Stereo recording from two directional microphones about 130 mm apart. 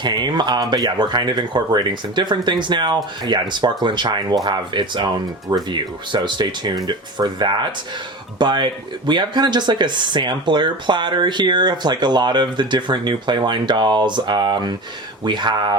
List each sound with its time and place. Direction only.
0.0 s speech: 35° right (ahead or behind)